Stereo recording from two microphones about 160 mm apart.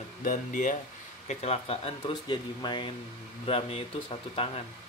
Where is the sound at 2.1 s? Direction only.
25° left (ahead or behind).